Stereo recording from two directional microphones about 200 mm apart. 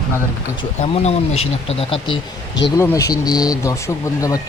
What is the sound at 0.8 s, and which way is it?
Speech, 30° left (ahead or behind).